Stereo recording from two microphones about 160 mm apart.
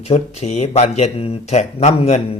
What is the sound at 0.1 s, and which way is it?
Speech, 45° left (ahead or behind).